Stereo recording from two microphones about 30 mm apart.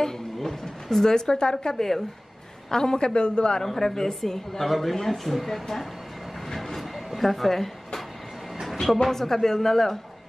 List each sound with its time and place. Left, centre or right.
0.4 s a woman's voice: centre; by 3.6 s left
3.6 s a woman's voice: centre
6.5 s vehicle: centre
7.2 s a woman's voice: centre